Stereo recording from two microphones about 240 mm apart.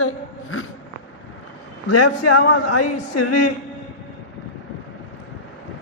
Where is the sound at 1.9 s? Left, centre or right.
Left.